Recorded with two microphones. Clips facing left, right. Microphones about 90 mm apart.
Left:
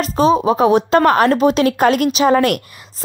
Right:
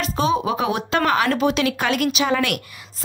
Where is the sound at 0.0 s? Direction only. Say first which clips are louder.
Left 7 dB; 40° left (ahead or behind).